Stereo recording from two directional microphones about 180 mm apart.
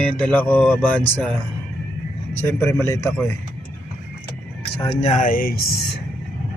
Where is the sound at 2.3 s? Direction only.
10° left (ahead or behind).